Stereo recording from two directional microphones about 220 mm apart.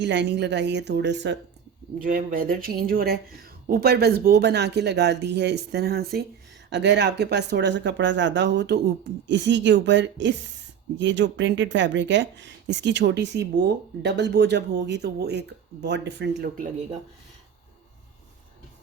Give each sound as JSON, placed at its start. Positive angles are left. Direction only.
{"t": 0.0, "sound": "speech", "side_deg": -55}
{"t": 2.0, "sound": "speech", "side_deg": -40}